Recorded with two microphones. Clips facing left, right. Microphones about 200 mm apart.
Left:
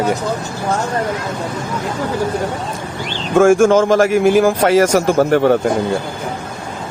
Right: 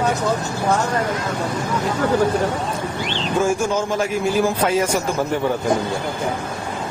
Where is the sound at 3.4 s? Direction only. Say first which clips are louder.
Left 11 dB; 90° left.